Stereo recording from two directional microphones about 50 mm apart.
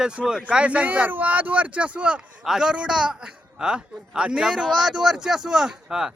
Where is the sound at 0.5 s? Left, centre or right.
Right.